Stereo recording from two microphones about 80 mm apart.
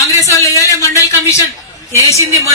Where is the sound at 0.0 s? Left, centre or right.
Left.